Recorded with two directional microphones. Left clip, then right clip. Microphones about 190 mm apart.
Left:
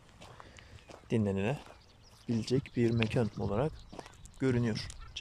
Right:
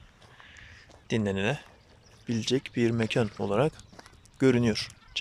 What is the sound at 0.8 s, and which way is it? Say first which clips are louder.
Speech: right 4 dB; 5° left (ahead or behind).